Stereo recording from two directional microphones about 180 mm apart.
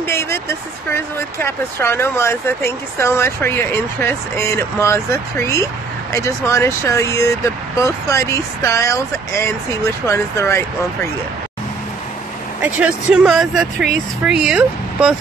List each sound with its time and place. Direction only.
0.0 s speech: 15° left (ahead or behind)
12.6 s speech: 5° right (ahead or behind)